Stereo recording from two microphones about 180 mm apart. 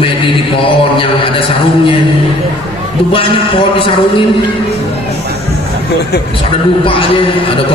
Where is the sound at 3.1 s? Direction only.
30° left (ahead or behind).